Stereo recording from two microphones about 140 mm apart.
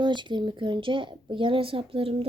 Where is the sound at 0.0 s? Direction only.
35° right (ahead or behind).